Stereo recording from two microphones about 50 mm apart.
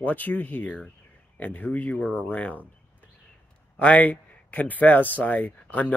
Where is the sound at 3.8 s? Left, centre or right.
Left.